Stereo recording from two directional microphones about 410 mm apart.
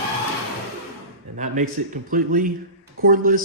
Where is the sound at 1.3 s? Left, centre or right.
Centre.